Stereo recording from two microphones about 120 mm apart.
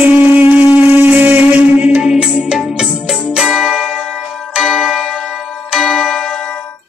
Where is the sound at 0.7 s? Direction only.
15° right (ahead or behind).